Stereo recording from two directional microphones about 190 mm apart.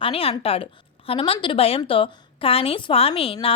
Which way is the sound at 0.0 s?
30° left (ahead or behind).